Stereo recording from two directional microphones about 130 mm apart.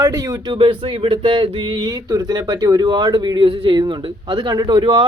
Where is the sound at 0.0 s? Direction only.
25° right (ahead or behind).